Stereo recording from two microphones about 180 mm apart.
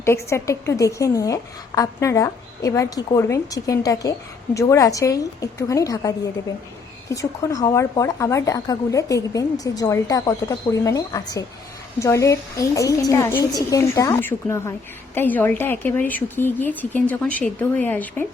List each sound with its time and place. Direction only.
0.0 s a woman's voice: 15° left (ahead or behind)